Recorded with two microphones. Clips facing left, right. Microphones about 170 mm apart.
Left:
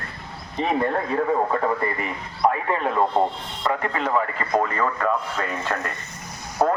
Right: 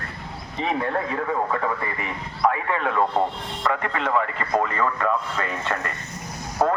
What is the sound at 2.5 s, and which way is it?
Speech, 30° left (ahead or behind).